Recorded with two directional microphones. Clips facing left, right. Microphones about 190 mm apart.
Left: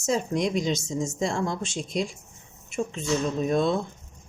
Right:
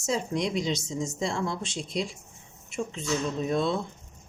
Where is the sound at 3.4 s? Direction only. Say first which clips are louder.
Left 3 dB; 50° left (ahead or behind).